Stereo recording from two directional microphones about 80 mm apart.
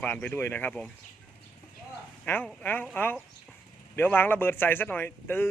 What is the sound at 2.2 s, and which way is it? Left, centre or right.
Speech, left.